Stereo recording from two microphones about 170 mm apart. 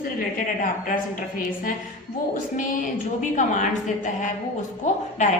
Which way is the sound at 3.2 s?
45° left (ahead or behind).